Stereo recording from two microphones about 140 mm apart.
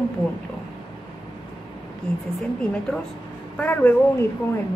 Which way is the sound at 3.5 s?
10° left (ahead or behind).